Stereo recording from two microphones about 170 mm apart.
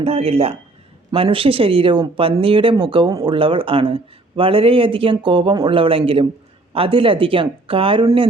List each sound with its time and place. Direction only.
0.0 s speech: 35° right (ahead or behind)